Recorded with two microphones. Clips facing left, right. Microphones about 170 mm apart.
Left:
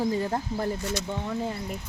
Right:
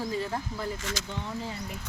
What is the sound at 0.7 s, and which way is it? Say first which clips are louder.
Speech: left 5 dB; 90° right.